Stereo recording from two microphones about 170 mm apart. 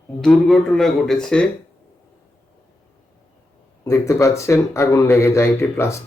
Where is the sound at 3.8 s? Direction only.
15° left (ahead or behind).